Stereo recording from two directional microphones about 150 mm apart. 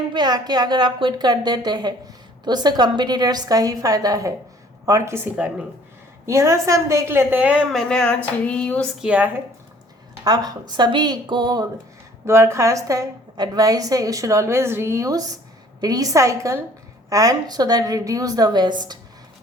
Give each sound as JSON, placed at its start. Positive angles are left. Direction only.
{"t": 0.1, "sound": "a woman's voice", "side_deg": -30}
{"t": 9.0, "sound": "a woman's voice", "side_deg": -10}
{"t": 10.2, "sound": "a woman's voice", "side_deg": -25}
{"t": 12.2, "sound": "a woman's voice", "side_deg": -20}